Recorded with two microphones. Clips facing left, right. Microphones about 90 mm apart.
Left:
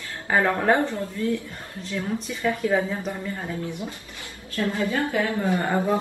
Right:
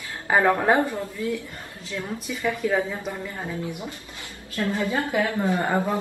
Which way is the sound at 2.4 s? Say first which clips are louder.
Left 1 dB; 5° left (ahead or behind).